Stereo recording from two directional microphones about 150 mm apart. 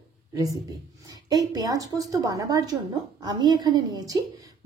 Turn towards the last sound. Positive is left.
turn(degrees=-25)  # may be behind; listen again after turning